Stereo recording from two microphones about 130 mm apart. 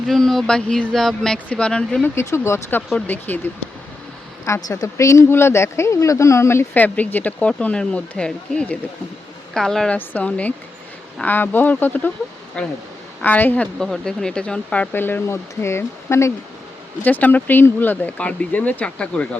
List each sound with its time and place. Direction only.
0.1 s speech: centre (ahead or behind)
2.0 s speech: 20° left (ahead or behind)